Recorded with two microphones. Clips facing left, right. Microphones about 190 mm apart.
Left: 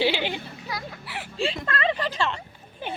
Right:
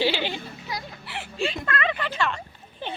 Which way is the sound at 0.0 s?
15° left (ahead or behind).